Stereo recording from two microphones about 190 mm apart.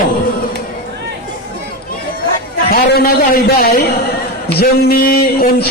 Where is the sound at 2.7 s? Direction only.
55° left (ahead or behind).